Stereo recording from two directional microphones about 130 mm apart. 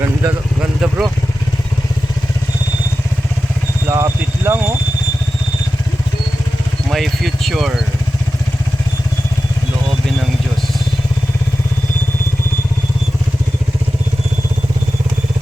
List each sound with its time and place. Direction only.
0.8 s speech: 5° right (ahead or behind)
3.8 s speech: 20° right (ahead or behind)
6.9 s speech: centre (ahead or behind)